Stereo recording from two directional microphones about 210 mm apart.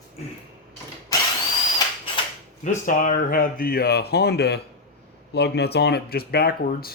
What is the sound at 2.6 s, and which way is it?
Speech, 40° left (ahead or behind).